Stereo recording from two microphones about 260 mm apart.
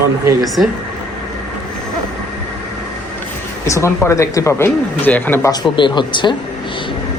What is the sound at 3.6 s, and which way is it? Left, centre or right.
A man's voice, centre.